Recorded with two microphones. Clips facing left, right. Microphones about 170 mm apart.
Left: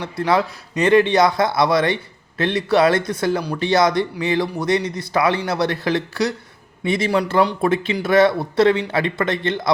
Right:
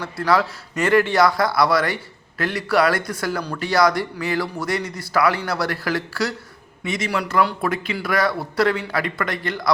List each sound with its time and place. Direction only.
0.0 s a man's voice: 20° left (ahead or behind)